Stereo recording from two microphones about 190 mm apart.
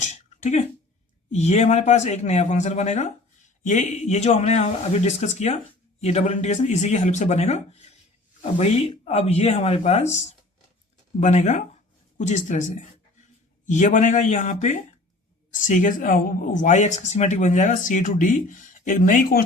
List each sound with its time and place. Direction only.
0.0 s a sound: 40° left (ahead or behind)
1.3 s a man's voice: 35° left (ahead or behind)
13.7 s a man's voice: 40° left (ahead or behind)